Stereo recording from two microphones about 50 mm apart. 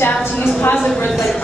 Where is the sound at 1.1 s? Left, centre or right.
Centre.